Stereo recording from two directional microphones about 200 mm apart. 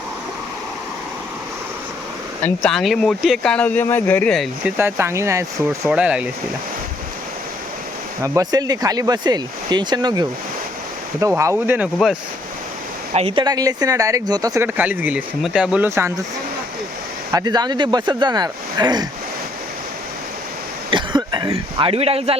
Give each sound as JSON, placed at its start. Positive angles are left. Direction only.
{"t": 2.4, "sound": "speech", "side_deg": 5}
{"t": 4.6, "sound": "speech", "side_deg": -10}
{"t": 8.2, "sound": "speech", "side_deg": -15}
{"t": 13.1, "sound": "speech", "side_deg": -25}
{"t": 17.3, "sound": "speech", "side_deg": -20}
{"t": 20.9, "sound": "speech", "side_deg": -20}